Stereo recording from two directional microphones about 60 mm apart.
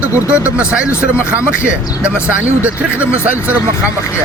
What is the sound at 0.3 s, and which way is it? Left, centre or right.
Speech, right.